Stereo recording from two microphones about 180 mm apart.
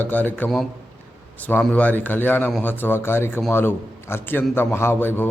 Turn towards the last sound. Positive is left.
turn(degrees=10)  # may be behind; listen again after turning